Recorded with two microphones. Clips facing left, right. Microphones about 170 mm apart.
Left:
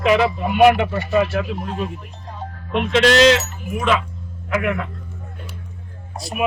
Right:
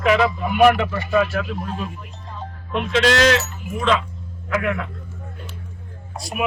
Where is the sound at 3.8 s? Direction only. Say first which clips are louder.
Even; 5° left (ahead or behind).